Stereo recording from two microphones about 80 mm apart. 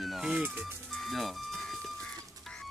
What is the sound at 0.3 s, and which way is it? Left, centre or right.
Speech, centre.